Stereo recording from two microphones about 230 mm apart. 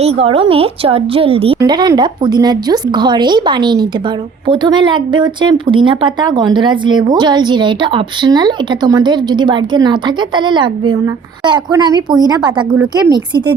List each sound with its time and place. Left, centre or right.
0.0 s a woman's voice: right